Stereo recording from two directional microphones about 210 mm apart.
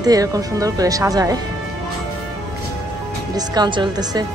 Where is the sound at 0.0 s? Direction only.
15° right (ahead or behind).